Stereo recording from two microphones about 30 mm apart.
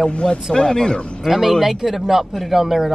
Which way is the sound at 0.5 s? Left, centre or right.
Left.